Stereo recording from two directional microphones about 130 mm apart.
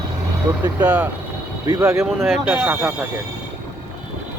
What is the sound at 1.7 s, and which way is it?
Speech, 25° right (ahead or behind).